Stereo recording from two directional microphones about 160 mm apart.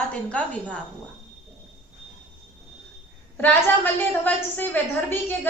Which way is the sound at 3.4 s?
10° left (ahead or behind).